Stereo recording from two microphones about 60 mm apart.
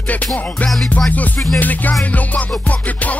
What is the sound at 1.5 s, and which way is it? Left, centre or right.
Music, left.